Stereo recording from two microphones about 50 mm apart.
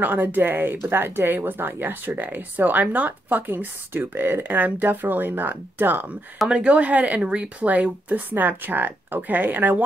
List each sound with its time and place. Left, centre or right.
0.0 s speech: right
6.5 s speech: centre; by 9.8 s right